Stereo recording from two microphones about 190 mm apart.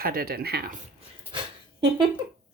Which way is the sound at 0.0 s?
50° right (ahead or behind).